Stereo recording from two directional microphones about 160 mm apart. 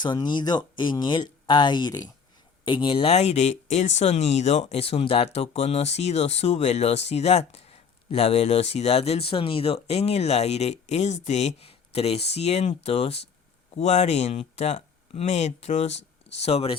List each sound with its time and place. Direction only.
0.0 s speech: 30° left (ahead or behind)